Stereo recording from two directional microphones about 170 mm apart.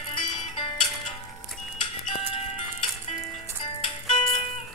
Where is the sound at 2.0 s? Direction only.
40° left (ahead or behind).